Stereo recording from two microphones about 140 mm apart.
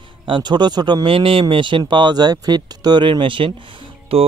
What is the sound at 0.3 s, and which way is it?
Speech, 30° right (ahead or behind).